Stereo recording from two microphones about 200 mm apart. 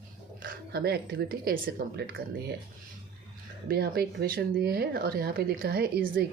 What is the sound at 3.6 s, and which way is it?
Speech, 50° right (ahead or behind).